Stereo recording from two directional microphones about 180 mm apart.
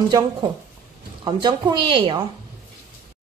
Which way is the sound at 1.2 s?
25° right (ahead or behind).